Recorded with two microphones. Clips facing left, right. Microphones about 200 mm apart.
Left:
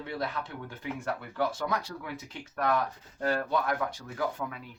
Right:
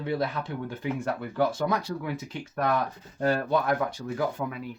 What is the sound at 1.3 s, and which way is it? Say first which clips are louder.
Speech: right 5 dB; 25° right (ahead or behind).